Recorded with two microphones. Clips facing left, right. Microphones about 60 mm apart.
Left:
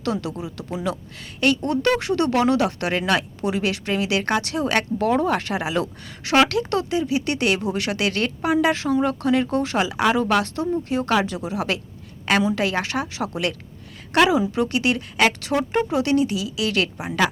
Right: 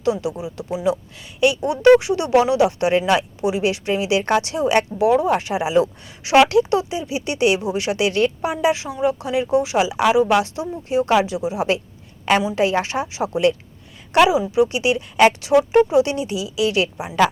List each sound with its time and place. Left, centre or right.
0.0 s speech: centre
14.1 s speech: centre